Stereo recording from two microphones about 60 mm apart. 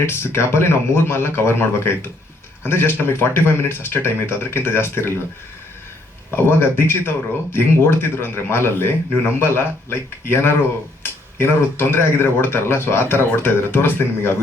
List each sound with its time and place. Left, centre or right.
0.0 s speech: left
6.3 s speech: left